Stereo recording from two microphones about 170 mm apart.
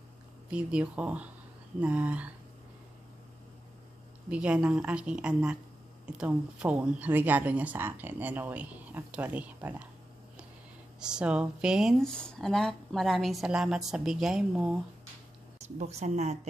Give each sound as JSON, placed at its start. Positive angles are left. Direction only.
{"t": 0.5, "sound": "speech", "side_deg": -5}
{"t": 4.3, "sound": "speech", "side_deg": -5}
{"t": 11.0, "sound": "speech", "side_deg": -5}
{"t": 15.8, "sound": "speech", "side_deg": -40}